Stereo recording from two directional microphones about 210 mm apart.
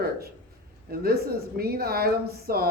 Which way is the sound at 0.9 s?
45° right (ahead or behind).